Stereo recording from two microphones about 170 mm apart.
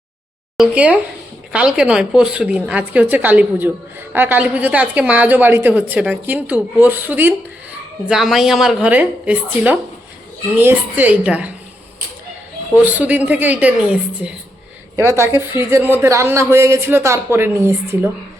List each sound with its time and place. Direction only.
0.5 s a woman's voice: 5° right (ahead or behind)
12.8 s a woman's voice: 10° right (ahead or behind)